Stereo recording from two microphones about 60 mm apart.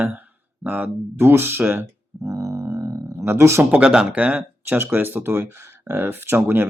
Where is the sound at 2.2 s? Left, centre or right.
Right.